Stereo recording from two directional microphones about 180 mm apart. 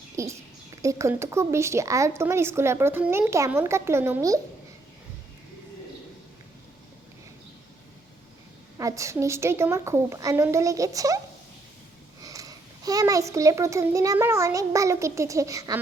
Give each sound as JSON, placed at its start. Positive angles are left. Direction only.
{"t": 0.2, "sound": "a woman's voice", "side_deg": -15}
{"t": 8.8, "sound": "a woman's voice", "side_deg": -15}
{"t": 12.2, "sound": "a child's voice", "side_deg": -20}